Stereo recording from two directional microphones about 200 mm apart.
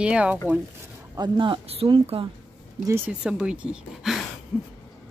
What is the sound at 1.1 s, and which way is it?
Speech, 25° right (ahead or behind).